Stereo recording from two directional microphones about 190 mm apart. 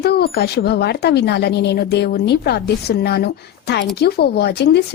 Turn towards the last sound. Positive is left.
turn(degrees=60)  # may be behind; listen again after turning